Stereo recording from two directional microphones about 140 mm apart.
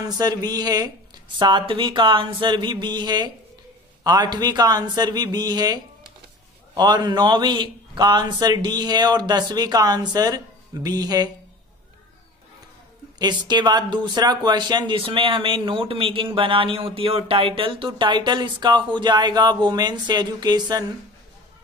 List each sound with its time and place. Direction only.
0.0 s a man's voice: 30° right (ahead or behind)
13.2 s a man's voice: 30° right (ahead or behind)